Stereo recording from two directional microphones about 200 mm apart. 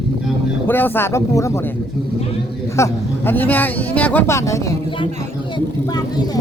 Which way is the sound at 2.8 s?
10° left (ahead or behind).